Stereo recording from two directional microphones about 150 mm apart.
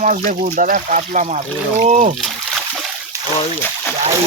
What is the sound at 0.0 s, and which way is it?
Speech, 60° right (ahead or behind).